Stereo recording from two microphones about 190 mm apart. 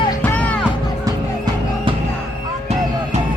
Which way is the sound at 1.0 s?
20° right (ahead or behind).